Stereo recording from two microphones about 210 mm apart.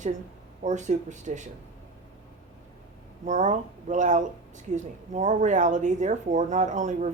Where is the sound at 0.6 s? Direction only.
35° right (ahead or behind).